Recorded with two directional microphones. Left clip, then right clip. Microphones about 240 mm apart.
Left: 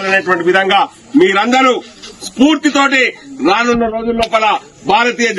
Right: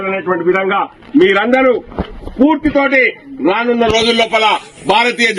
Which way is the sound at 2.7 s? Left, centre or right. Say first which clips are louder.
Even; centre.